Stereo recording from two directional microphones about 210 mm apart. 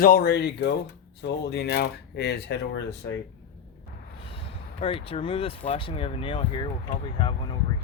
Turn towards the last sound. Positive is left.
turn(degrees=20)  # may be behind; listen again after turning